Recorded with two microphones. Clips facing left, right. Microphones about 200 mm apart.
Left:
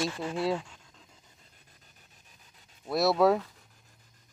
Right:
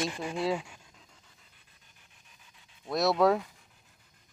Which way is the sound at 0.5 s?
10° right (ahead or behind).